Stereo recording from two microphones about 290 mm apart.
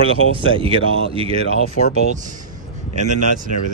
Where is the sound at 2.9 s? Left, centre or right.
Right.